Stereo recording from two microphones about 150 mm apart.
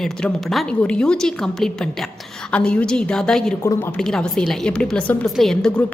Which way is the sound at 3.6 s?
20° left (ahead or behind).